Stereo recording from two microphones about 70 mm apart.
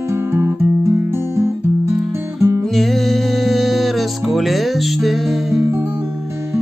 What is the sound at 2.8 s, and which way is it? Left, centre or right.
Music, centre.